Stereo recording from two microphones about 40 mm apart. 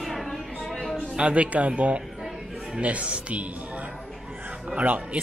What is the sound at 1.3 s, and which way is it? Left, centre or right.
Speech, right.